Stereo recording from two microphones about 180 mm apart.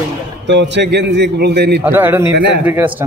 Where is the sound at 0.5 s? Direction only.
80° right.